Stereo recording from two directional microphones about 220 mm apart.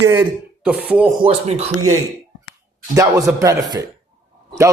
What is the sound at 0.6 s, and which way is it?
Speech, 5° right (ahead or behind).